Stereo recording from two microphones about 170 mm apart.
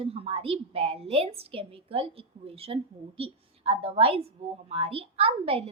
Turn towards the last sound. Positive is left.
turn(degrees=-35)  # may be behind; listen again after turning